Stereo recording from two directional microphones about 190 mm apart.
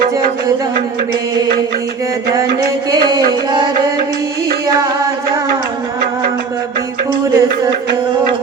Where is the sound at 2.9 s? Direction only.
20° right (ahead or behind).